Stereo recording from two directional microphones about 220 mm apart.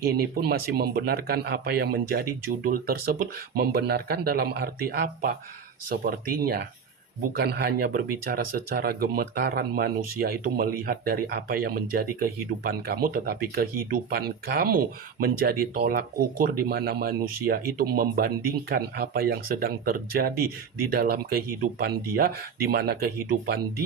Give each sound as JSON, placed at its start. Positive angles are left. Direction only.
{"t": 0.0, "sound": "speech", "side_deg": -45}